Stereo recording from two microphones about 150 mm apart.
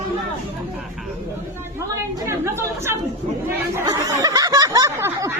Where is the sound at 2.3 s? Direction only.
20° right (ahead or behind).